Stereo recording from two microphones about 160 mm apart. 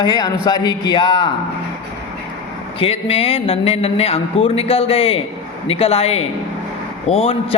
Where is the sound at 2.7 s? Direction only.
35° left (ahead or behind).